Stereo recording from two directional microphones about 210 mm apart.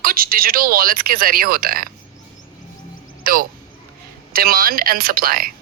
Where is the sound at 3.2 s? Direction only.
45° right (ahead or behind).